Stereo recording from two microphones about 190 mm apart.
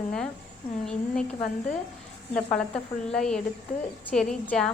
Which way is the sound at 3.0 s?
5° left (ahead or behind).